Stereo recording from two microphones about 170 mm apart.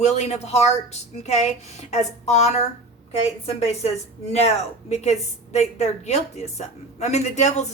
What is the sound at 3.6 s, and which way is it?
A woman's voice, 40° left (ahead or behind).